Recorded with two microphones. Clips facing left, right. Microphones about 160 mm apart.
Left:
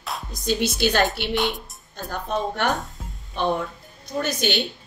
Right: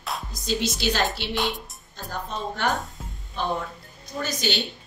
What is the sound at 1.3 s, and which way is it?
Music, centre (ahead or behind).